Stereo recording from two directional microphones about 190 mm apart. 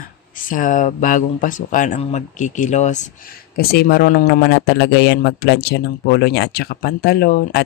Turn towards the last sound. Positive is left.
turn(degrees=50)  # may be behind; listen again after turning